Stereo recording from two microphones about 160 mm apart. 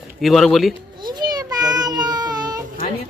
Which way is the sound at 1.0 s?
25° right (ahead or behind).